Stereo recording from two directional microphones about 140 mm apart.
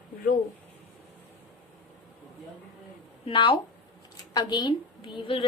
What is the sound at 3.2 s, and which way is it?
A woman's voice, 35° left (ahead or behind).